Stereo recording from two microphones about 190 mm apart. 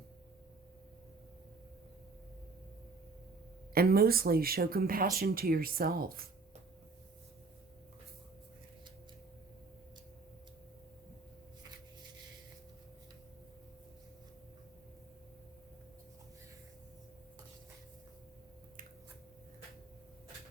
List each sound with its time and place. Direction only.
3.8 s speech: 50° right (ahead or behind)